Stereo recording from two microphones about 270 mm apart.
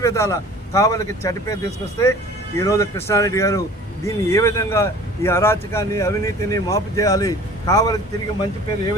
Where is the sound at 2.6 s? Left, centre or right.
Centre.